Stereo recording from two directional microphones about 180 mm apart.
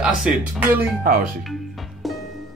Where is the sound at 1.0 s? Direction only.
55° right (ahead or behind).